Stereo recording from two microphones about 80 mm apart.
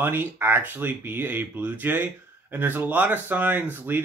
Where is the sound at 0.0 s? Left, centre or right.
Right.